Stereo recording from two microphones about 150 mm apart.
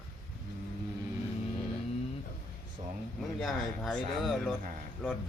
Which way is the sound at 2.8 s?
40° right (ahead or behind).